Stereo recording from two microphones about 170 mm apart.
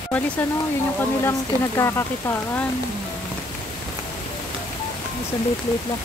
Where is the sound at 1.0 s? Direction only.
15° left (ahead or behind).